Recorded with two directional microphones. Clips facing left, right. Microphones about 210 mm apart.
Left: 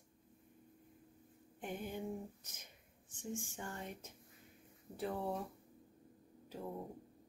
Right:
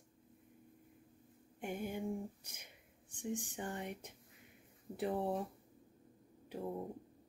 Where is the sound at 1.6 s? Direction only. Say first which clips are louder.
Right 3 dB; 10° right (ahead or behind).